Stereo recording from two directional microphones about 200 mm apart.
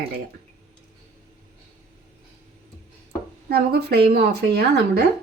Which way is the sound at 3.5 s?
50° right (ahead or behind).